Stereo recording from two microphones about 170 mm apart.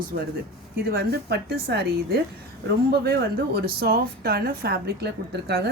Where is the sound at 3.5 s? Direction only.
65° right (ahead or behind).